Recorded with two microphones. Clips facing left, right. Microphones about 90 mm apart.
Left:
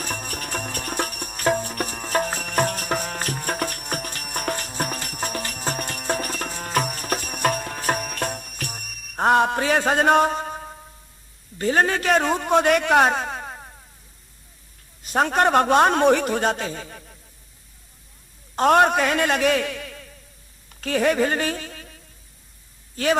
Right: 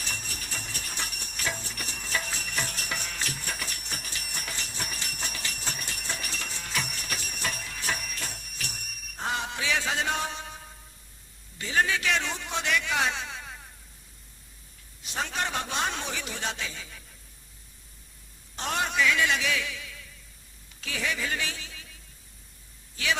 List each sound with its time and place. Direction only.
0.0 s music: 50° left (ahead or behind)
11.5 s a man's voice: 50° left (ahead or behind)
15.0 s a man's voice: 50° left (ahead or behind)
18.5 s a man's voice: 55° left (ahead or behind)